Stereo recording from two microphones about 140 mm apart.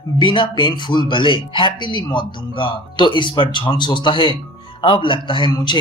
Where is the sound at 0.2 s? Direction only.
35° left (ahead or behind).